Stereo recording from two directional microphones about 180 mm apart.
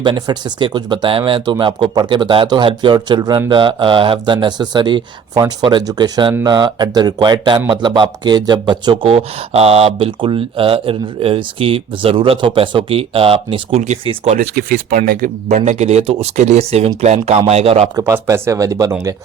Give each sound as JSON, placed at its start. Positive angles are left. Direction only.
{"t": 0.0, "sound": "speech", "side_deg": -25}
{"t": 14.3, "sound": "speech", "side_deg": -55}
{"t": 15.4, "sound": "speech", "side_deg": -40}
{"t": 17.9, "sound": "speech", "side_deg": -15}